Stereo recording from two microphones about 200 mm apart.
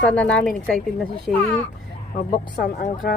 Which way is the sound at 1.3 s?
40° left (ahead or behind).